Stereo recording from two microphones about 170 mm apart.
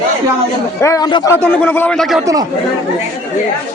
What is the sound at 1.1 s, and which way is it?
Speech, 20° left (ahead or behind).